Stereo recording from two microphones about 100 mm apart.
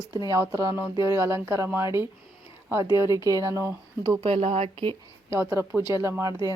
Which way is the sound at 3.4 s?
30° right (ahead or behind).